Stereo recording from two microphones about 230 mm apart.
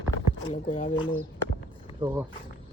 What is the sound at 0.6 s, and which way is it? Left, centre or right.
Speech, left.